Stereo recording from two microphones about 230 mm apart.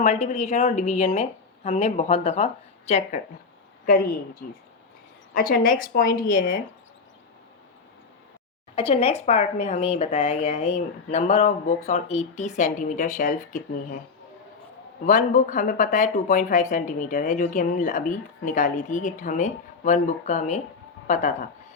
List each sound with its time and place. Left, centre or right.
0.0 s speech: left
3.8 s speech: left
8.7 s speech: left
15.0 s speech: left